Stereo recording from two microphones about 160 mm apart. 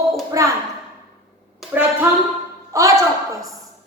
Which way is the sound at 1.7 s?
15° right (ahead or behind).